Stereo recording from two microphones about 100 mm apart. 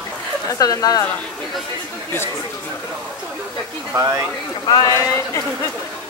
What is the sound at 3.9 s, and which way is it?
Speech, 30° right (ahead or behind).